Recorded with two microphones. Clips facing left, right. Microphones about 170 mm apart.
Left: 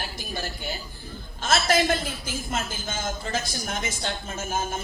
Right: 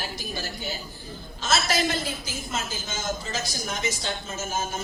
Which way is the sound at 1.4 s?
55° left (ahead or behind).